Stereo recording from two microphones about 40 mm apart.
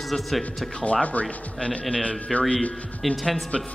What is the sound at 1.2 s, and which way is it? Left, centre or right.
Speech, left.